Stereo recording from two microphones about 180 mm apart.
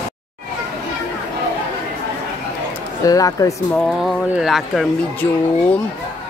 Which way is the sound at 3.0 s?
20° left (ahead or behind).